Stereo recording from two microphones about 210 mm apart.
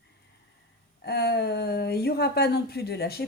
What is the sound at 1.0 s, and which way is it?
Speech, 50° left (ahead or behind).